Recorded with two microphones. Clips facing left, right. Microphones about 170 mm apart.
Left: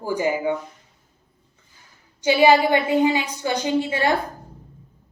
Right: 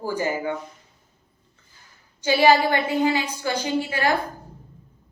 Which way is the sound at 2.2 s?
15° left (ahead or behind).